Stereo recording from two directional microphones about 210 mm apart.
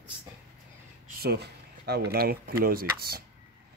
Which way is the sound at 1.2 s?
50° right (ahead or behind).